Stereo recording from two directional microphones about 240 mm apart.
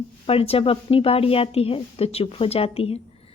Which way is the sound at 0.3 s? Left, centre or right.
Left.